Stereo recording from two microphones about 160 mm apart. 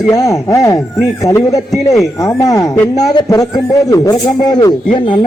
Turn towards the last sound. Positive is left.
turn(degrees=30)  # may be behind; listen again after turning